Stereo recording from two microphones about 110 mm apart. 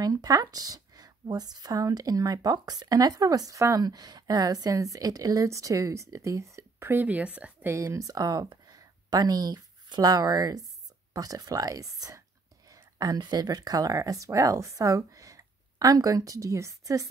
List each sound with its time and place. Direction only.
0.0 s speech: 35° right (ahead or behind); by 7.7 s 15° right (ahead or behind)
7.7 s speech: 25° right (ahead or behind)